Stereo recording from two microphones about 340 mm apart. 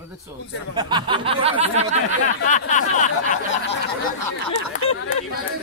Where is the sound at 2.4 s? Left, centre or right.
Left.